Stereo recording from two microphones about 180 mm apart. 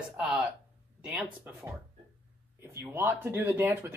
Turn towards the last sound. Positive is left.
turn(degrees=-10)  # may be behind; listen again after turning